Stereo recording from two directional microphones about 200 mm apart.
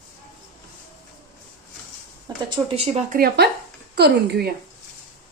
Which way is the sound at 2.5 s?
30° right (ahead or behind).